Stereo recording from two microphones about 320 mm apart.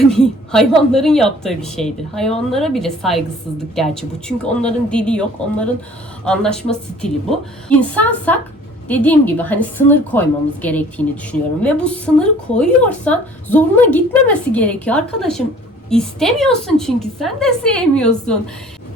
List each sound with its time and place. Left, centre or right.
0.0 s a woman's voice: centre